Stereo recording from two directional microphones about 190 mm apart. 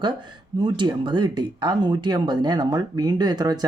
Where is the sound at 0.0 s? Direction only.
25° right (ahead or behind).